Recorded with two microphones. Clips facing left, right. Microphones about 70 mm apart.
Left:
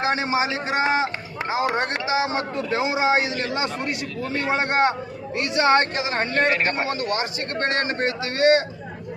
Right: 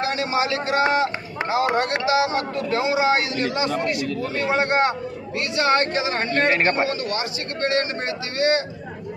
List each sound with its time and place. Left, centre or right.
0.0 s a man's voice: left
6.5 s a man's voice: right
6.8 s a man's voice: left